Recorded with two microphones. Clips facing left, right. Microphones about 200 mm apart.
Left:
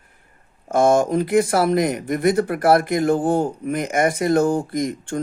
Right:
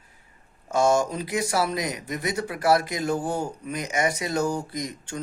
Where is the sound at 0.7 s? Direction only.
55° left (ahead or behind).